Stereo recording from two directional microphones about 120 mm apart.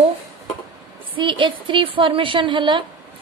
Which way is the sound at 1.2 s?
45° right (ahead or behind).